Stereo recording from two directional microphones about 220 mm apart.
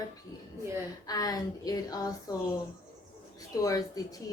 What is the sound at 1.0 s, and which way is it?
A woman's voice, 15° left (ahead or behind).